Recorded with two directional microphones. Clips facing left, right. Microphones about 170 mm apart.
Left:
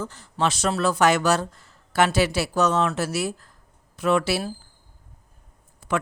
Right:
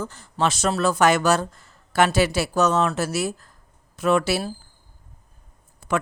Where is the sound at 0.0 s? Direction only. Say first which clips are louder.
Right 1 dB; 45° right (ahead or behind).